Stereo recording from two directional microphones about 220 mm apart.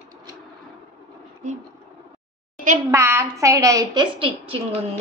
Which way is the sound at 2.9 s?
10° right (ahead or behind).